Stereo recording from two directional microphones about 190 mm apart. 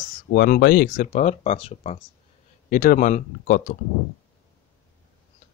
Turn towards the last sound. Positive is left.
turn(degrees=45)  # may be behind; listen again after turning